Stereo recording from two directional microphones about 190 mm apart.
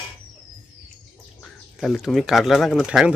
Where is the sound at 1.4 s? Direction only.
Centre (ahead or behind).